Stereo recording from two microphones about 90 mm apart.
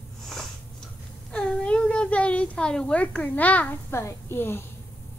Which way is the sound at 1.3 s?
10° left (ahead or behind).